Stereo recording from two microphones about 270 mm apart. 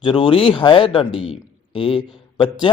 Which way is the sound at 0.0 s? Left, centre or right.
Centre.